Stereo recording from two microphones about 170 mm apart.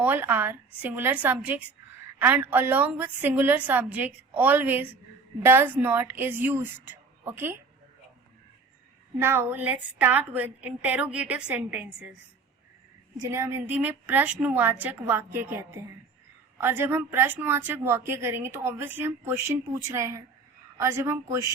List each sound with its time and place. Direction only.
0.0 s a woman's voice: 10° right (ahead or behind)
9.1 s a woman's voice: 15° right (ahead or behind)
13.1 s a woman's voice: 15° right (ahead or behind)